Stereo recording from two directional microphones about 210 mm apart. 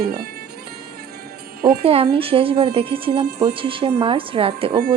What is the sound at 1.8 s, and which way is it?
A woman's voice, 25° right (ahead or behind).